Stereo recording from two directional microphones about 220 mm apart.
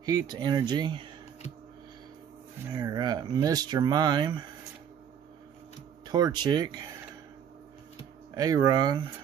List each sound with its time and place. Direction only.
0.0 s speech: 20° right (ahead or behind)
2.7 s speech: 20° right (ahead or behind)
6.0 s speech: 20° right (ahead or behind)
8.4 s speech: 15° right (ahead or behind)